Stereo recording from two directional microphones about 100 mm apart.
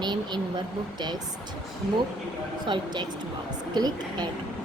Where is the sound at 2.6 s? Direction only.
50° right (ahead or behind).